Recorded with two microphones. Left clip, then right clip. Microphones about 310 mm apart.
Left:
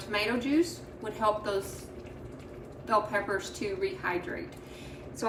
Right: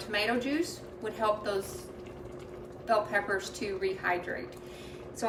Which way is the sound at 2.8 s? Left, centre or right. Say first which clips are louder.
Even; centre.